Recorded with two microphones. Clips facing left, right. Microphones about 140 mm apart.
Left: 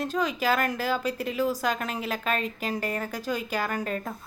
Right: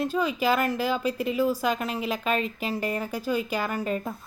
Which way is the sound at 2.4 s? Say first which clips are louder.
Right 2 dB; 40° left (ahead or behind).